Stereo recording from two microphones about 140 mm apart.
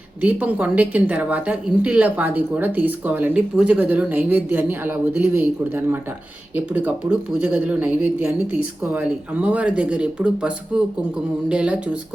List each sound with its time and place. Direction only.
0.2 s a woman's voice: 10° right (ahead or behind)